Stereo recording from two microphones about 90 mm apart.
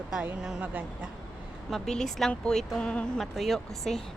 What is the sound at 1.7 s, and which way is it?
Speech, 5° left (ahead or behind).